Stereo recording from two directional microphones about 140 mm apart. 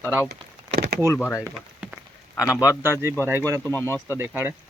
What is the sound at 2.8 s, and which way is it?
Speech, 20° right (ahead or behind).